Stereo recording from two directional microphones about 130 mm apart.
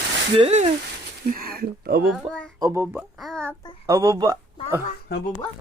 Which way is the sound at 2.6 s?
20° right (ahead or behind).